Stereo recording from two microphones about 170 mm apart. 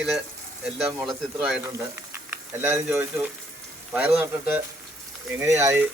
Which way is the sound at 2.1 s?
15° right (ahead or behind).